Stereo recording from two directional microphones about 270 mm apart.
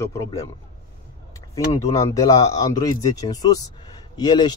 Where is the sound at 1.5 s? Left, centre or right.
Centre.